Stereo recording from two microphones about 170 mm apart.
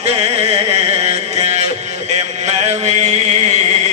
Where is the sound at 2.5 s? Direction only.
40° right (ahead or behind).